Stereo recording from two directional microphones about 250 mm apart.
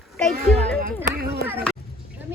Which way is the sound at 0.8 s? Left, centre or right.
Right.